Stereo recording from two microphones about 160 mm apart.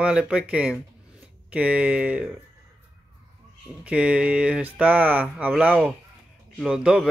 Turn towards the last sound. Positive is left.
turn(degrees=-5)  # may be behind; listen again after turning